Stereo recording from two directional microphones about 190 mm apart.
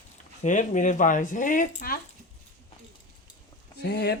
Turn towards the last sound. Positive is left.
turn(degrees=60)  # may be behind; listen again after turning